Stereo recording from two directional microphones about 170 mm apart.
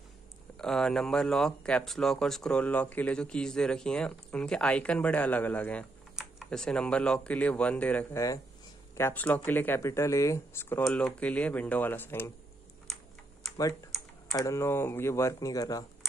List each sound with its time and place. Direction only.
0.6 s speech: 5° left (ahead or behind)
10.8 s speech: 5° left (ahead or behind)
12.8 s typing: centre (ahead or behind)
14.3 s speech: 20° left (ahead or behind)